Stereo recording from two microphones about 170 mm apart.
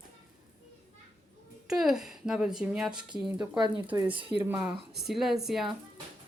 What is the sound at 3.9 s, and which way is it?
Speech, 30° right (ahead or behind).